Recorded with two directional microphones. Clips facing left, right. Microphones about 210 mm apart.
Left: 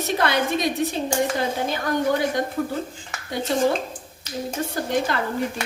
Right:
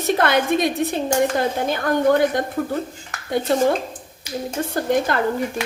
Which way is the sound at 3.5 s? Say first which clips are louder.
Right 3 dB; 55° right (ahead or behind).